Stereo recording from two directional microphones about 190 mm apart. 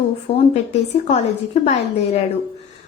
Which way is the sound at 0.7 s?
35° left (ahead or behind).